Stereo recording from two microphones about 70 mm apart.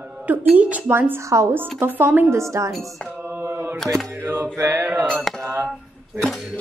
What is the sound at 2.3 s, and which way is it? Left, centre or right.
Speech, right.